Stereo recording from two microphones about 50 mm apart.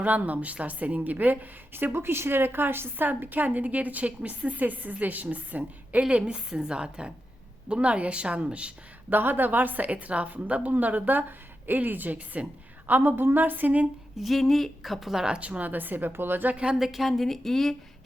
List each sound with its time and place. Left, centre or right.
0.0 s a woman's voice: right
9.0 s a woman's voice: right
12.9 s a woman's voice: right
14.2 s a woman's voice: centre
15.4 s a woman's voice: right
16.7 s a woman's voice: centre